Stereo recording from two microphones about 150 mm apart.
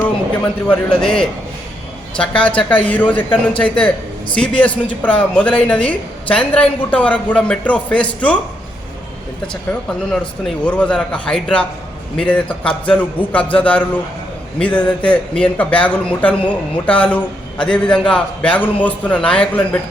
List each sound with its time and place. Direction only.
0.7 s a man's voice: 5° left (ahead or behind)
10.1 s a man's voice: 5° left (ahead or behind)